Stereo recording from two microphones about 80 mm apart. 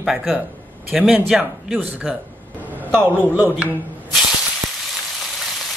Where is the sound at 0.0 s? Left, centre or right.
Centre.